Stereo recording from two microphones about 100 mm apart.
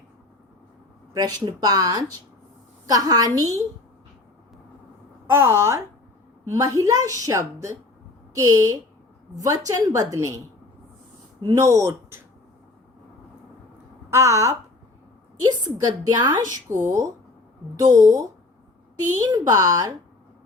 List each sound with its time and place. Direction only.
1.1 s a woman's voice: 40° right (ahead or behind)
5.3 s a woman's voice: 25° right (ahead or behind)
11.4 s a woman's voice: 30° right (ahead or behind)
14.1 s a woman's voice: 30° right (ahead or behind)